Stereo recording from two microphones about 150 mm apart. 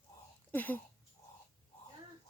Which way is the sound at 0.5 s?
10° left (ahead or behind).